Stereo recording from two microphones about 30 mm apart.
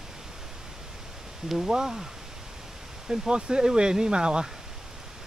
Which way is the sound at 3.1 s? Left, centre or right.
Right.